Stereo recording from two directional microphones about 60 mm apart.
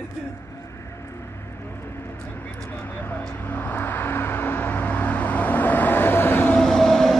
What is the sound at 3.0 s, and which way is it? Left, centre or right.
Vehicle, left.